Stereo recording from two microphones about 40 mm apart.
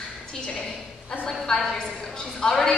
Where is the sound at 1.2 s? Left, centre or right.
Centre.